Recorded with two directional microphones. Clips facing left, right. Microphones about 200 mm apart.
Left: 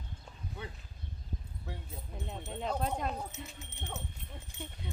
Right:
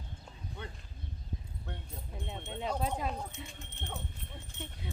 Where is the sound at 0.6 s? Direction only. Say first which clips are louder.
Left 1 dB; 5° left (ahead or behind).